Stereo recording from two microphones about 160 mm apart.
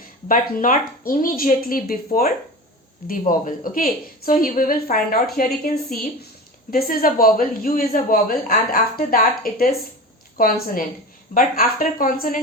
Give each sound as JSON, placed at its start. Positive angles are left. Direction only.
{"t": 0.3, "sound": "a woman's voice", "side_deg": 55}